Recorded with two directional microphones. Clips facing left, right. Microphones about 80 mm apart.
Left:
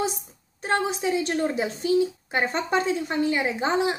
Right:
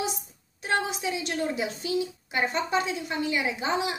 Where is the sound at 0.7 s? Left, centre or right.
Left.